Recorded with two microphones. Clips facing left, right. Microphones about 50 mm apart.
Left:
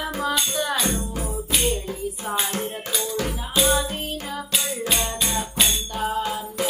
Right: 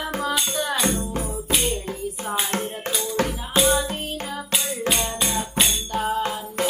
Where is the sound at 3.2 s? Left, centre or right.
Right.